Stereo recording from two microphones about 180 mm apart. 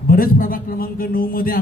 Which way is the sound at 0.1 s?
50° left (ahead or behind).